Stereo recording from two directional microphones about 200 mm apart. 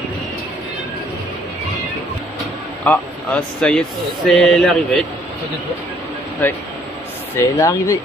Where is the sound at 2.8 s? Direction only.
5° left (ahead or behind).